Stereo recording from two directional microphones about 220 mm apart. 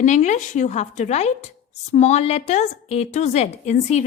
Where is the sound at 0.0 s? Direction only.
35° left (ahead or behind).